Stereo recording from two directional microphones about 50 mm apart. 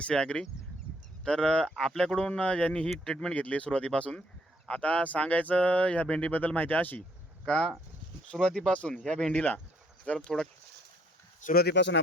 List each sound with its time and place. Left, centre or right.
0.0 s speech: centre
3.3 s speech: left
6.3 s speech: left
7.4 s speech: left
10.2 s speech: centre